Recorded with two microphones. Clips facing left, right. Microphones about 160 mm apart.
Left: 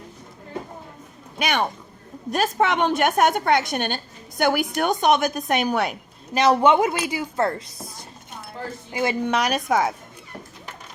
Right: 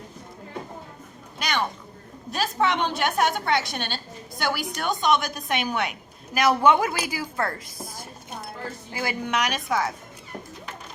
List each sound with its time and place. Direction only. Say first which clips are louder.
1.4 s a woman's voice: left 4 dB; 55° left (ahead or behind); by 6.0 s 40° left (ahead or behind)
6.3 s speech: left 2 dB; 25° left (ahead or behind)
8.9 s a woman's voice: left 6 dB; 25° left (ahead or behind); by 9.9 s 50° left (ahead or behind)